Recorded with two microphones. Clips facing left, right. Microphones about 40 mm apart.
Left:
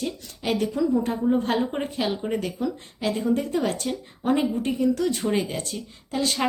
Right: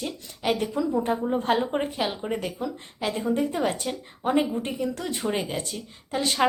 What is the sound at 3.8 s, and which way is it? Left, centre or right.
A woman's voice, centre.